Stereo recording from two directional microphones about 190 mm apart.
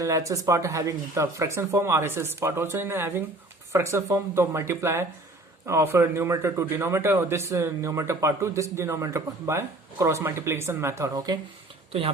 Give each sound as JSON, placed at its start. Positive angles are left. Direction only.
{"t": 0.0, "sound": "a man's voice", "side_deg": -15}
{"t": 11.9, "sound": "speech", "side_deg": -30}